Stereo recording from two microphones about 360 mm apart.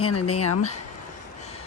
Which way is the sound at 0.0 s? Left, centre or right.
Left.